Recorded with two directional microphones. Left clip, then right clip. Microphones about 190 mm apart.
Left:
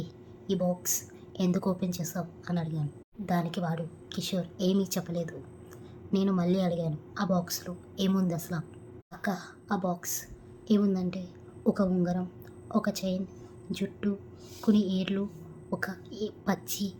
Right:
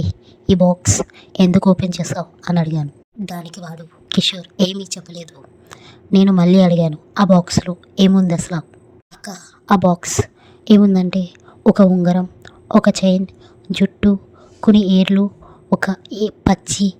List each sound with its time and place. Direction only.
0.0 s a woman's voice: 45° right (ahead or behind)
3.2 s a woman's voice: centre (ahead or behind)
3.8 s a woman's voice: 45° right (ahead or behind)
6.1 s a woman's voice: 45° right (ahead or behind)
9.6 s a woman's voice: 50° right (ahead or behind)